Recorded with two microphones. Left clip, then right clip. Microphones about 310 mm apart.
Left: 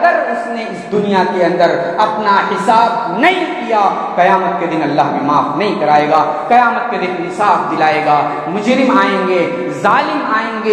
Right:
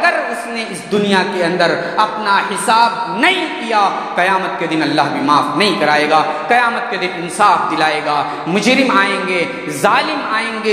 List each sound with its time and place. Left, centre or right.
1.0 s a man's voice: right